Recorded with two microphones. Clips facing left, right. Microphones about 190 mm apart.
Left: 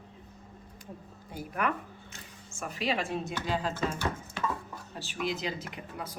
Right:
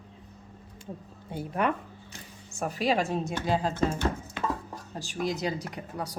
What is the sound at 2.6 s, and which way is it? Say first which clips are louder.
Speech: right 5 dB; 40° right (ahead or behind).